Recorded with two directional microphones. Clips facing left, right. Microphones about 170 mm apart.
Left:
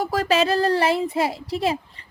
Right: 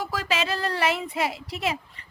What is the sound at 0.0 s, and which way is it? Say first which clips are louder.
Speech: left 8 dB; 45° left (ahead or behind).